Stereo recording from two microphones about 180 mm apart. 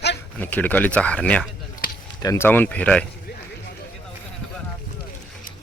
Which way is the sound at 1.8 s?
55° left (ahead or behind).